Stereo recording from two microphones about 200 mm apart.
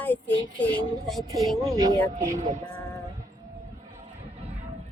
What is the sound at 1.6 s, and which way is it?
Speech, 15° right (ahead or behind).